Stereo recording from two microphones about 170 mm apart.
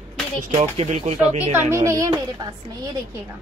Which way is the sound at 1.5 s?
15° right (ahead or behind).